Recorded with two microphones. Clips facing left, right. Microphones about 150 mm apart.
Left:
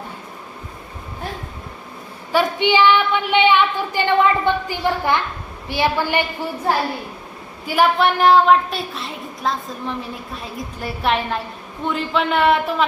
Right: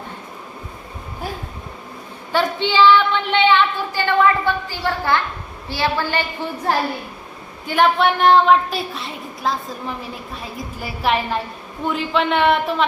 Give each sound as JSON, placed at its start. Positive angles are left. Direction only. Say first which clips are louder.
{"t": 2.3, "sound": "a woman's voice", "louder": "left 2 dB", "side_deg": 15}
{"t": 7.7, "sound": "a woman's voice", "louder": "even", "side_deg": 5}